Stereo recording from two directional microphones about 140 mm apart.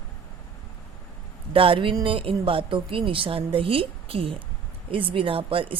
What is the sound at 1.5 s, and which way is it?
A woman's voice, 40° right (ahead or behind).